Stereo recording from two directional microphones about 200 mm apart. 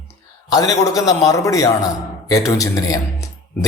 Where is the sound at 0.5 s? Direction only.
15° left (ahead or behind).